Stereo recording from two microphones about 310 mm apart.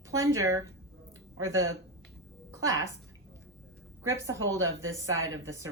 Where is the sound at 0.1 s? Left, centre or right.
Centre.